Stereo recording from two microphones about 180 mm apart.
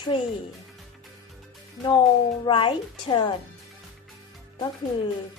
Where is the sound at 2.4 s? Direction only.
30° left (ahead or behind).